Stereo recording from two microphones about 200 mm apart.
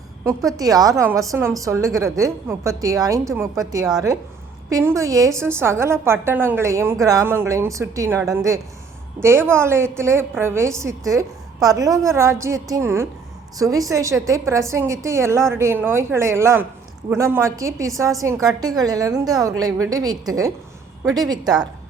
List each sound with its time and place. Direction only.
0.3 s a woman's voice: 15° right (ahead or behind)
9.2 s a woman's voice: 10° right (ahead or behind)